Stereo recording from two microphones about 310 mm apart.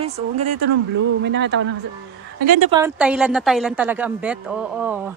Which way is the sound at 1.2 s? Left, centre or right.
Right.